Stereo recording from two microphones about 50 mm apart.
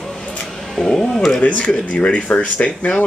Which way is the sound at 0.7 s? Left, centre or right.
Centre.